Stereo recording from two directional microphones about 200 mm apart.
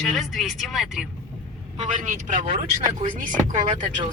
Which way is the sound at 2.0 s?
40° right (ahead or behind).